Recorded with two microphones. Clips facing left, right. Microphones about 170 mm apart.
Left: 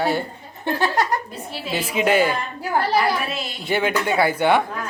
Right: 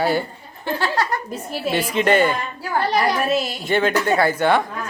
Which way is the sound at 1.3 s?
45° right (ahead or behind).